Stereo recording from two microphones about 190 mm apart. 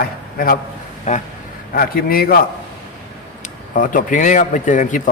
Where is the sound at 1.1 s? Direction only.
40° left (ahead or behind).